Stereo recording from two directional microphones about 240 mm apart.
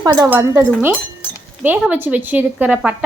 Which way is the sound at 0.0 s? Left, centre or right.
Centre.